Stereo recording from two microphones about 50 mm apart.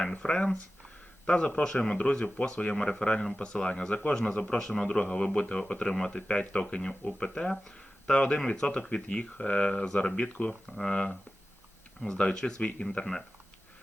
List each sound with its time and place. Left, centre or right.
0.2 s speech: centre
10.2 s speech: left
10.8 s speech: left